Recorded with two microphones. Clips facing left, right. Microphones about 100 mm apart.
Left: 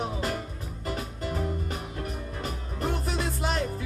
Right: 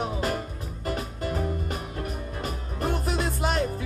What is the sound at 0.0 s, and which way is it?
Music, 55° right (ahead or behind).